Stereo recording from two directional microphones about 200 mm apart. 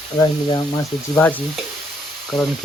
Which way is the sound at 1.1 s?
10° left (ahead or behind).